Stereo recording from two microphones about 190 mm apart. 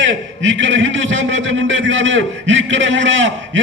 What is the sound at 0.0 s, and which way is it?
A man's voice, 80° right.